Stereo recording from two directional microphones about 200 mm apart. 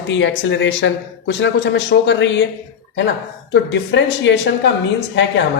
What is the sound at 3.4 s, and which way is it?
Speech, 65° left (ahead or behind).